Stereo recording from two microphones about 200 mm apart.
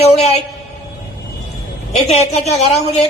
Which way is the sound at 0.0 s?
30° left (ahead or behind).